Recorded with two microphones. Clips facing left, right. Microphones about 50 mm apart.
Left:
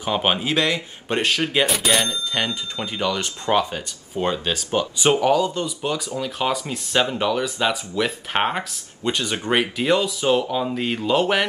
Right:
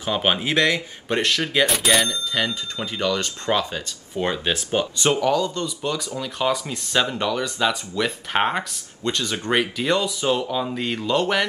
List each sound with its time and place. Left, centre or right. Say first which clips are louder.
0.0 s speech: left 1 dB; centre
0.4 s speech: right 1 dB; right
1.0 s speech: left 1 dB; centre
1.7 s speech: right 1 dB; centre
2.0 s speech: even; centre
5.2 s speech: left 2 dB; centre